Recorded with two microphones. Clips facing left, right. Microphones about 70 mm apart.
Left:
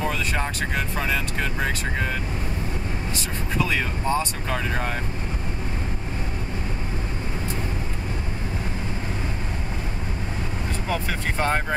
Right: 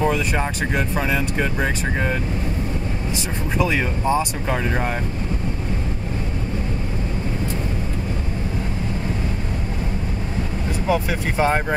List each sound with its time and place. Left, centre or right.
0.0 s speech: centre
3.5 s speech: centre
10.9 s speech: centre